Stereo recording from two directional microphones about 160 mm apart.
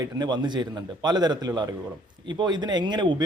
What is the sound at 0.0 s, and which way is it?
A man's voice, 25° right (ahead or behind).